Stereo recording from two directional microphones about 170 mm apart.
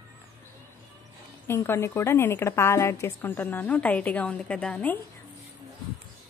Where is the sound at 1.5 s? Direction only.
15° left (ahead or behind).